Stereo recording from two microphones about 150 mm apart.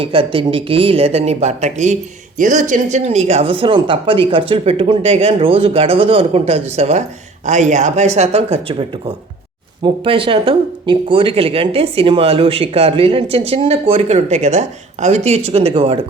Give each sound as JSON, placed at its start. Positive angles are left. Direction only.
{"t": 0.0, "sound": "speech", "side_deg": -35}